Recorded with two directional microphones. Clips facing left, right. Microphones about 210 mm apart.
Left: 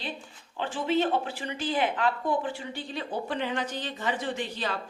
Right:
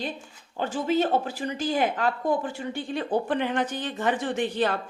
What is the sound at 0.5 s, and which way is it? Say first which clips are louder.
A woman's voice: right 2 dB; 45° right (ahead or behind).